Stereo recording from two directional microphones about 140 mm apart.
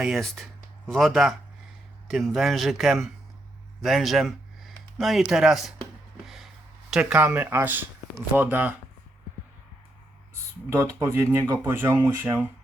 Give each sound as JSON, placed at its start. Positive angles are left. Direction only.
{"t": 0.0, "sound": "speech", "side_deg": 0}
{"t": 6.2, "sound": "a sound", "side_deg": 0}
{"t": 6.9, "sound": "speech", "side_deg": -10}
{"t": 10.7, "sound": "speech", "side_deg": -20}